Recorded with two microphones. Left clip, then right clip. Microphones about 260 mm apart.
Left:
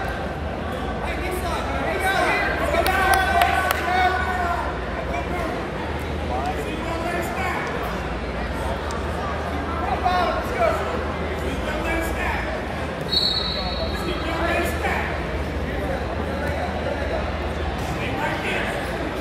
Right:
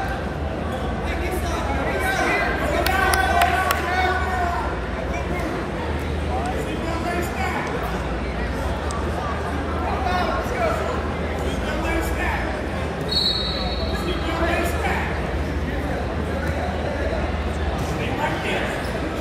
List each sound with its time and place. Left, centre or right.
2.8 s run: left